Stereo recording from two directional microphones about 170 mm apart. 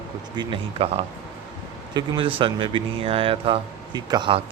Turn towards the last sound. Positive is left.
turn(degrees=-30)  # may be behind; listen again after turning